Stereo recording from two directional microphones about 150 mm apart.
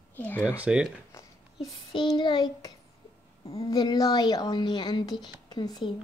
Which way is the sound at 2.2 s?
30° left (ahead or behind).